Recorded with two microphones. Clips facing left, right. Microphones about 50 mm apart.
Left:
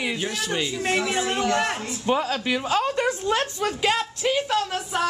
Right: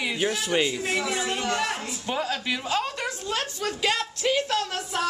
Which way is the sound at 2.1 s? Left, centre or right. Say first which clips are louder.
Left 5 dB; centre.